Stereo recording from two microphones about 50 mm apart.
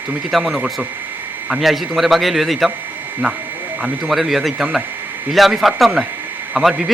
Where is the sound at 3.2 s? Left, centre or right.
Right.